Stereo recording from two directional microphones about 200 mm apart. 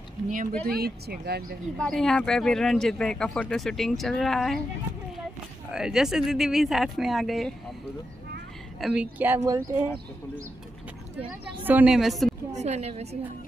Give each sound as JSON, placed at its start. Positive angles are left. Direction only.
{"t": 0.3, "sound": "a woman's voice", "side_deg": -40}
{"t": 1.8, "sound": "speech", "side_deg": 5}
{"t": 5.7, "sound": "speech", "side_deg": -5}
{"t": 8.7, "sound": "speech", "side_deg": -5}
{"t": 11.6, "sound": "speech", "side_deg": -5}
{"t": 12.5, "sound": "a woman's voice", "side_deg": -35}